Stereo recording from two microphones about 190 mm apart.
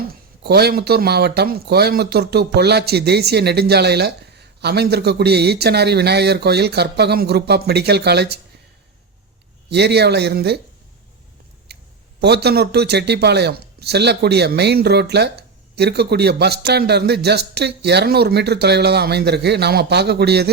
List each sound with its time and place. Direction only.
0.4 s speech: 60° right (ahead or behind)
9.6 s speech: 60° right (ahead or behind)
12.2 s speech: 60° right (ahead or behind)